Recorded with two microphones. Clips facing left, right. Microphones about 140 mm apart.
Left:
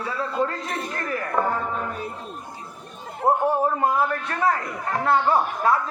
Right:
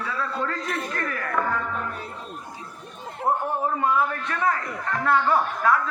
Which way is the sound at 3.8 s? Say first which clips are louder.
Left 1 dB; 35° left (ahead or behind).